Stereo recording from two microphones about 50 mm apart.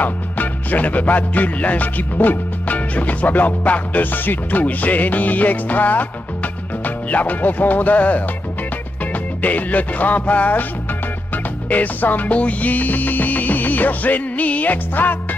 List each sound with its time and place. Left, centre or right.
0.0 s music: left
9.4 s music: left
11.7 s music: left